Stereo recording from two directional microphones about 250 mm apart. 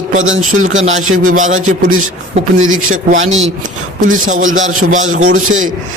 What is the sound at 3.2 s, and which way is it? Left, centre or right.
A man's voice, right.